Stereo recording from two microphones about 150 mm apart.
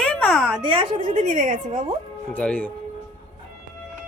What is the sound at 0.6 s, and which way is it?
A woman's voice, 40° right (ahead or behind).